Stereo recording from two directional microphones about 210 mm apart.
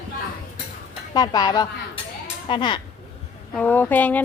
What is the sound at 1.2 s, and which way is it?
A woman's voice, 20° left (ahead or behind).